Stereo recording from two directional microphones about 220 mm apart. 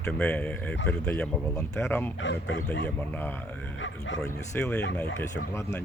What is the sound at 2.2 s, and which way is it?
Speech, 60° left (ahead or behind).